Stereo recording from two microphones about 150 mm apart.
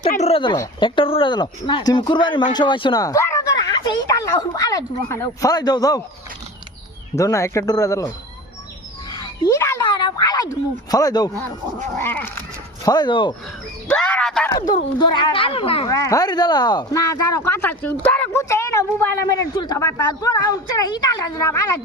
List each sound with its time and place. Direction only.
0.2 s speech: 40° left (ahead or behind)
7.2 s speech: 20° left (ahead or behind)
9.0 s a sound: 25° left (ahead or behind)
11.9 s speech: 15° left (ahead or behind)
12.8 s speech: 25° left (ahead or behind)
13.8 s a sound: 10° left (ahead or behind)
14.9 s speech: 30° left (ahead or behind)
15.9 s speech: 20° left (ahead or behind)